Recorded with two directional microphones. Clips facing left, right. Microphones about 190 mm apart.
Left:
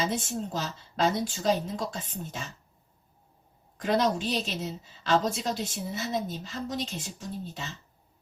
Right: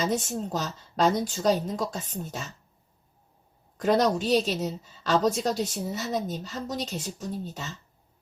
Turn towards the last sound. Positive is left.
turn(degrees=-40)  # may be behind; listen again after turning